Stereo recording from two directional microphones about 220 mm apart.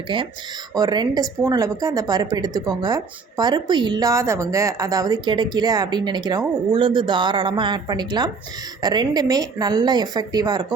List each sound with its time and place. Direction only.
0.1 s a woman's voice: 25° right (ahead or behind)